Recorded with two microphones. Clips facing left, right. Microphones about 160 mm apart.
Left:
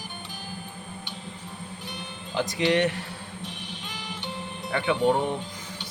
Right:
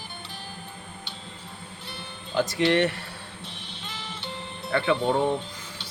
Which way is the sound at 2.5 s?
15° left (ahead or behind).